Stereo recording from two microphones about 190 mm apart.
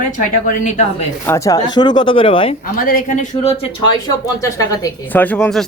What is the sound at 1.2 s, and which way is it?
A woman's voice, 15° left (ahead or behind).